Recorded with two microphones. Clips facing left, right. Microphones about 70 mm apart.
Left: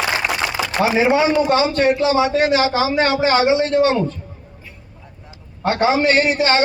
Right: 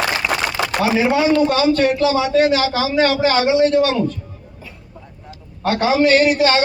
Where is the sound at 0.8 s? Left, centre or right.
Left.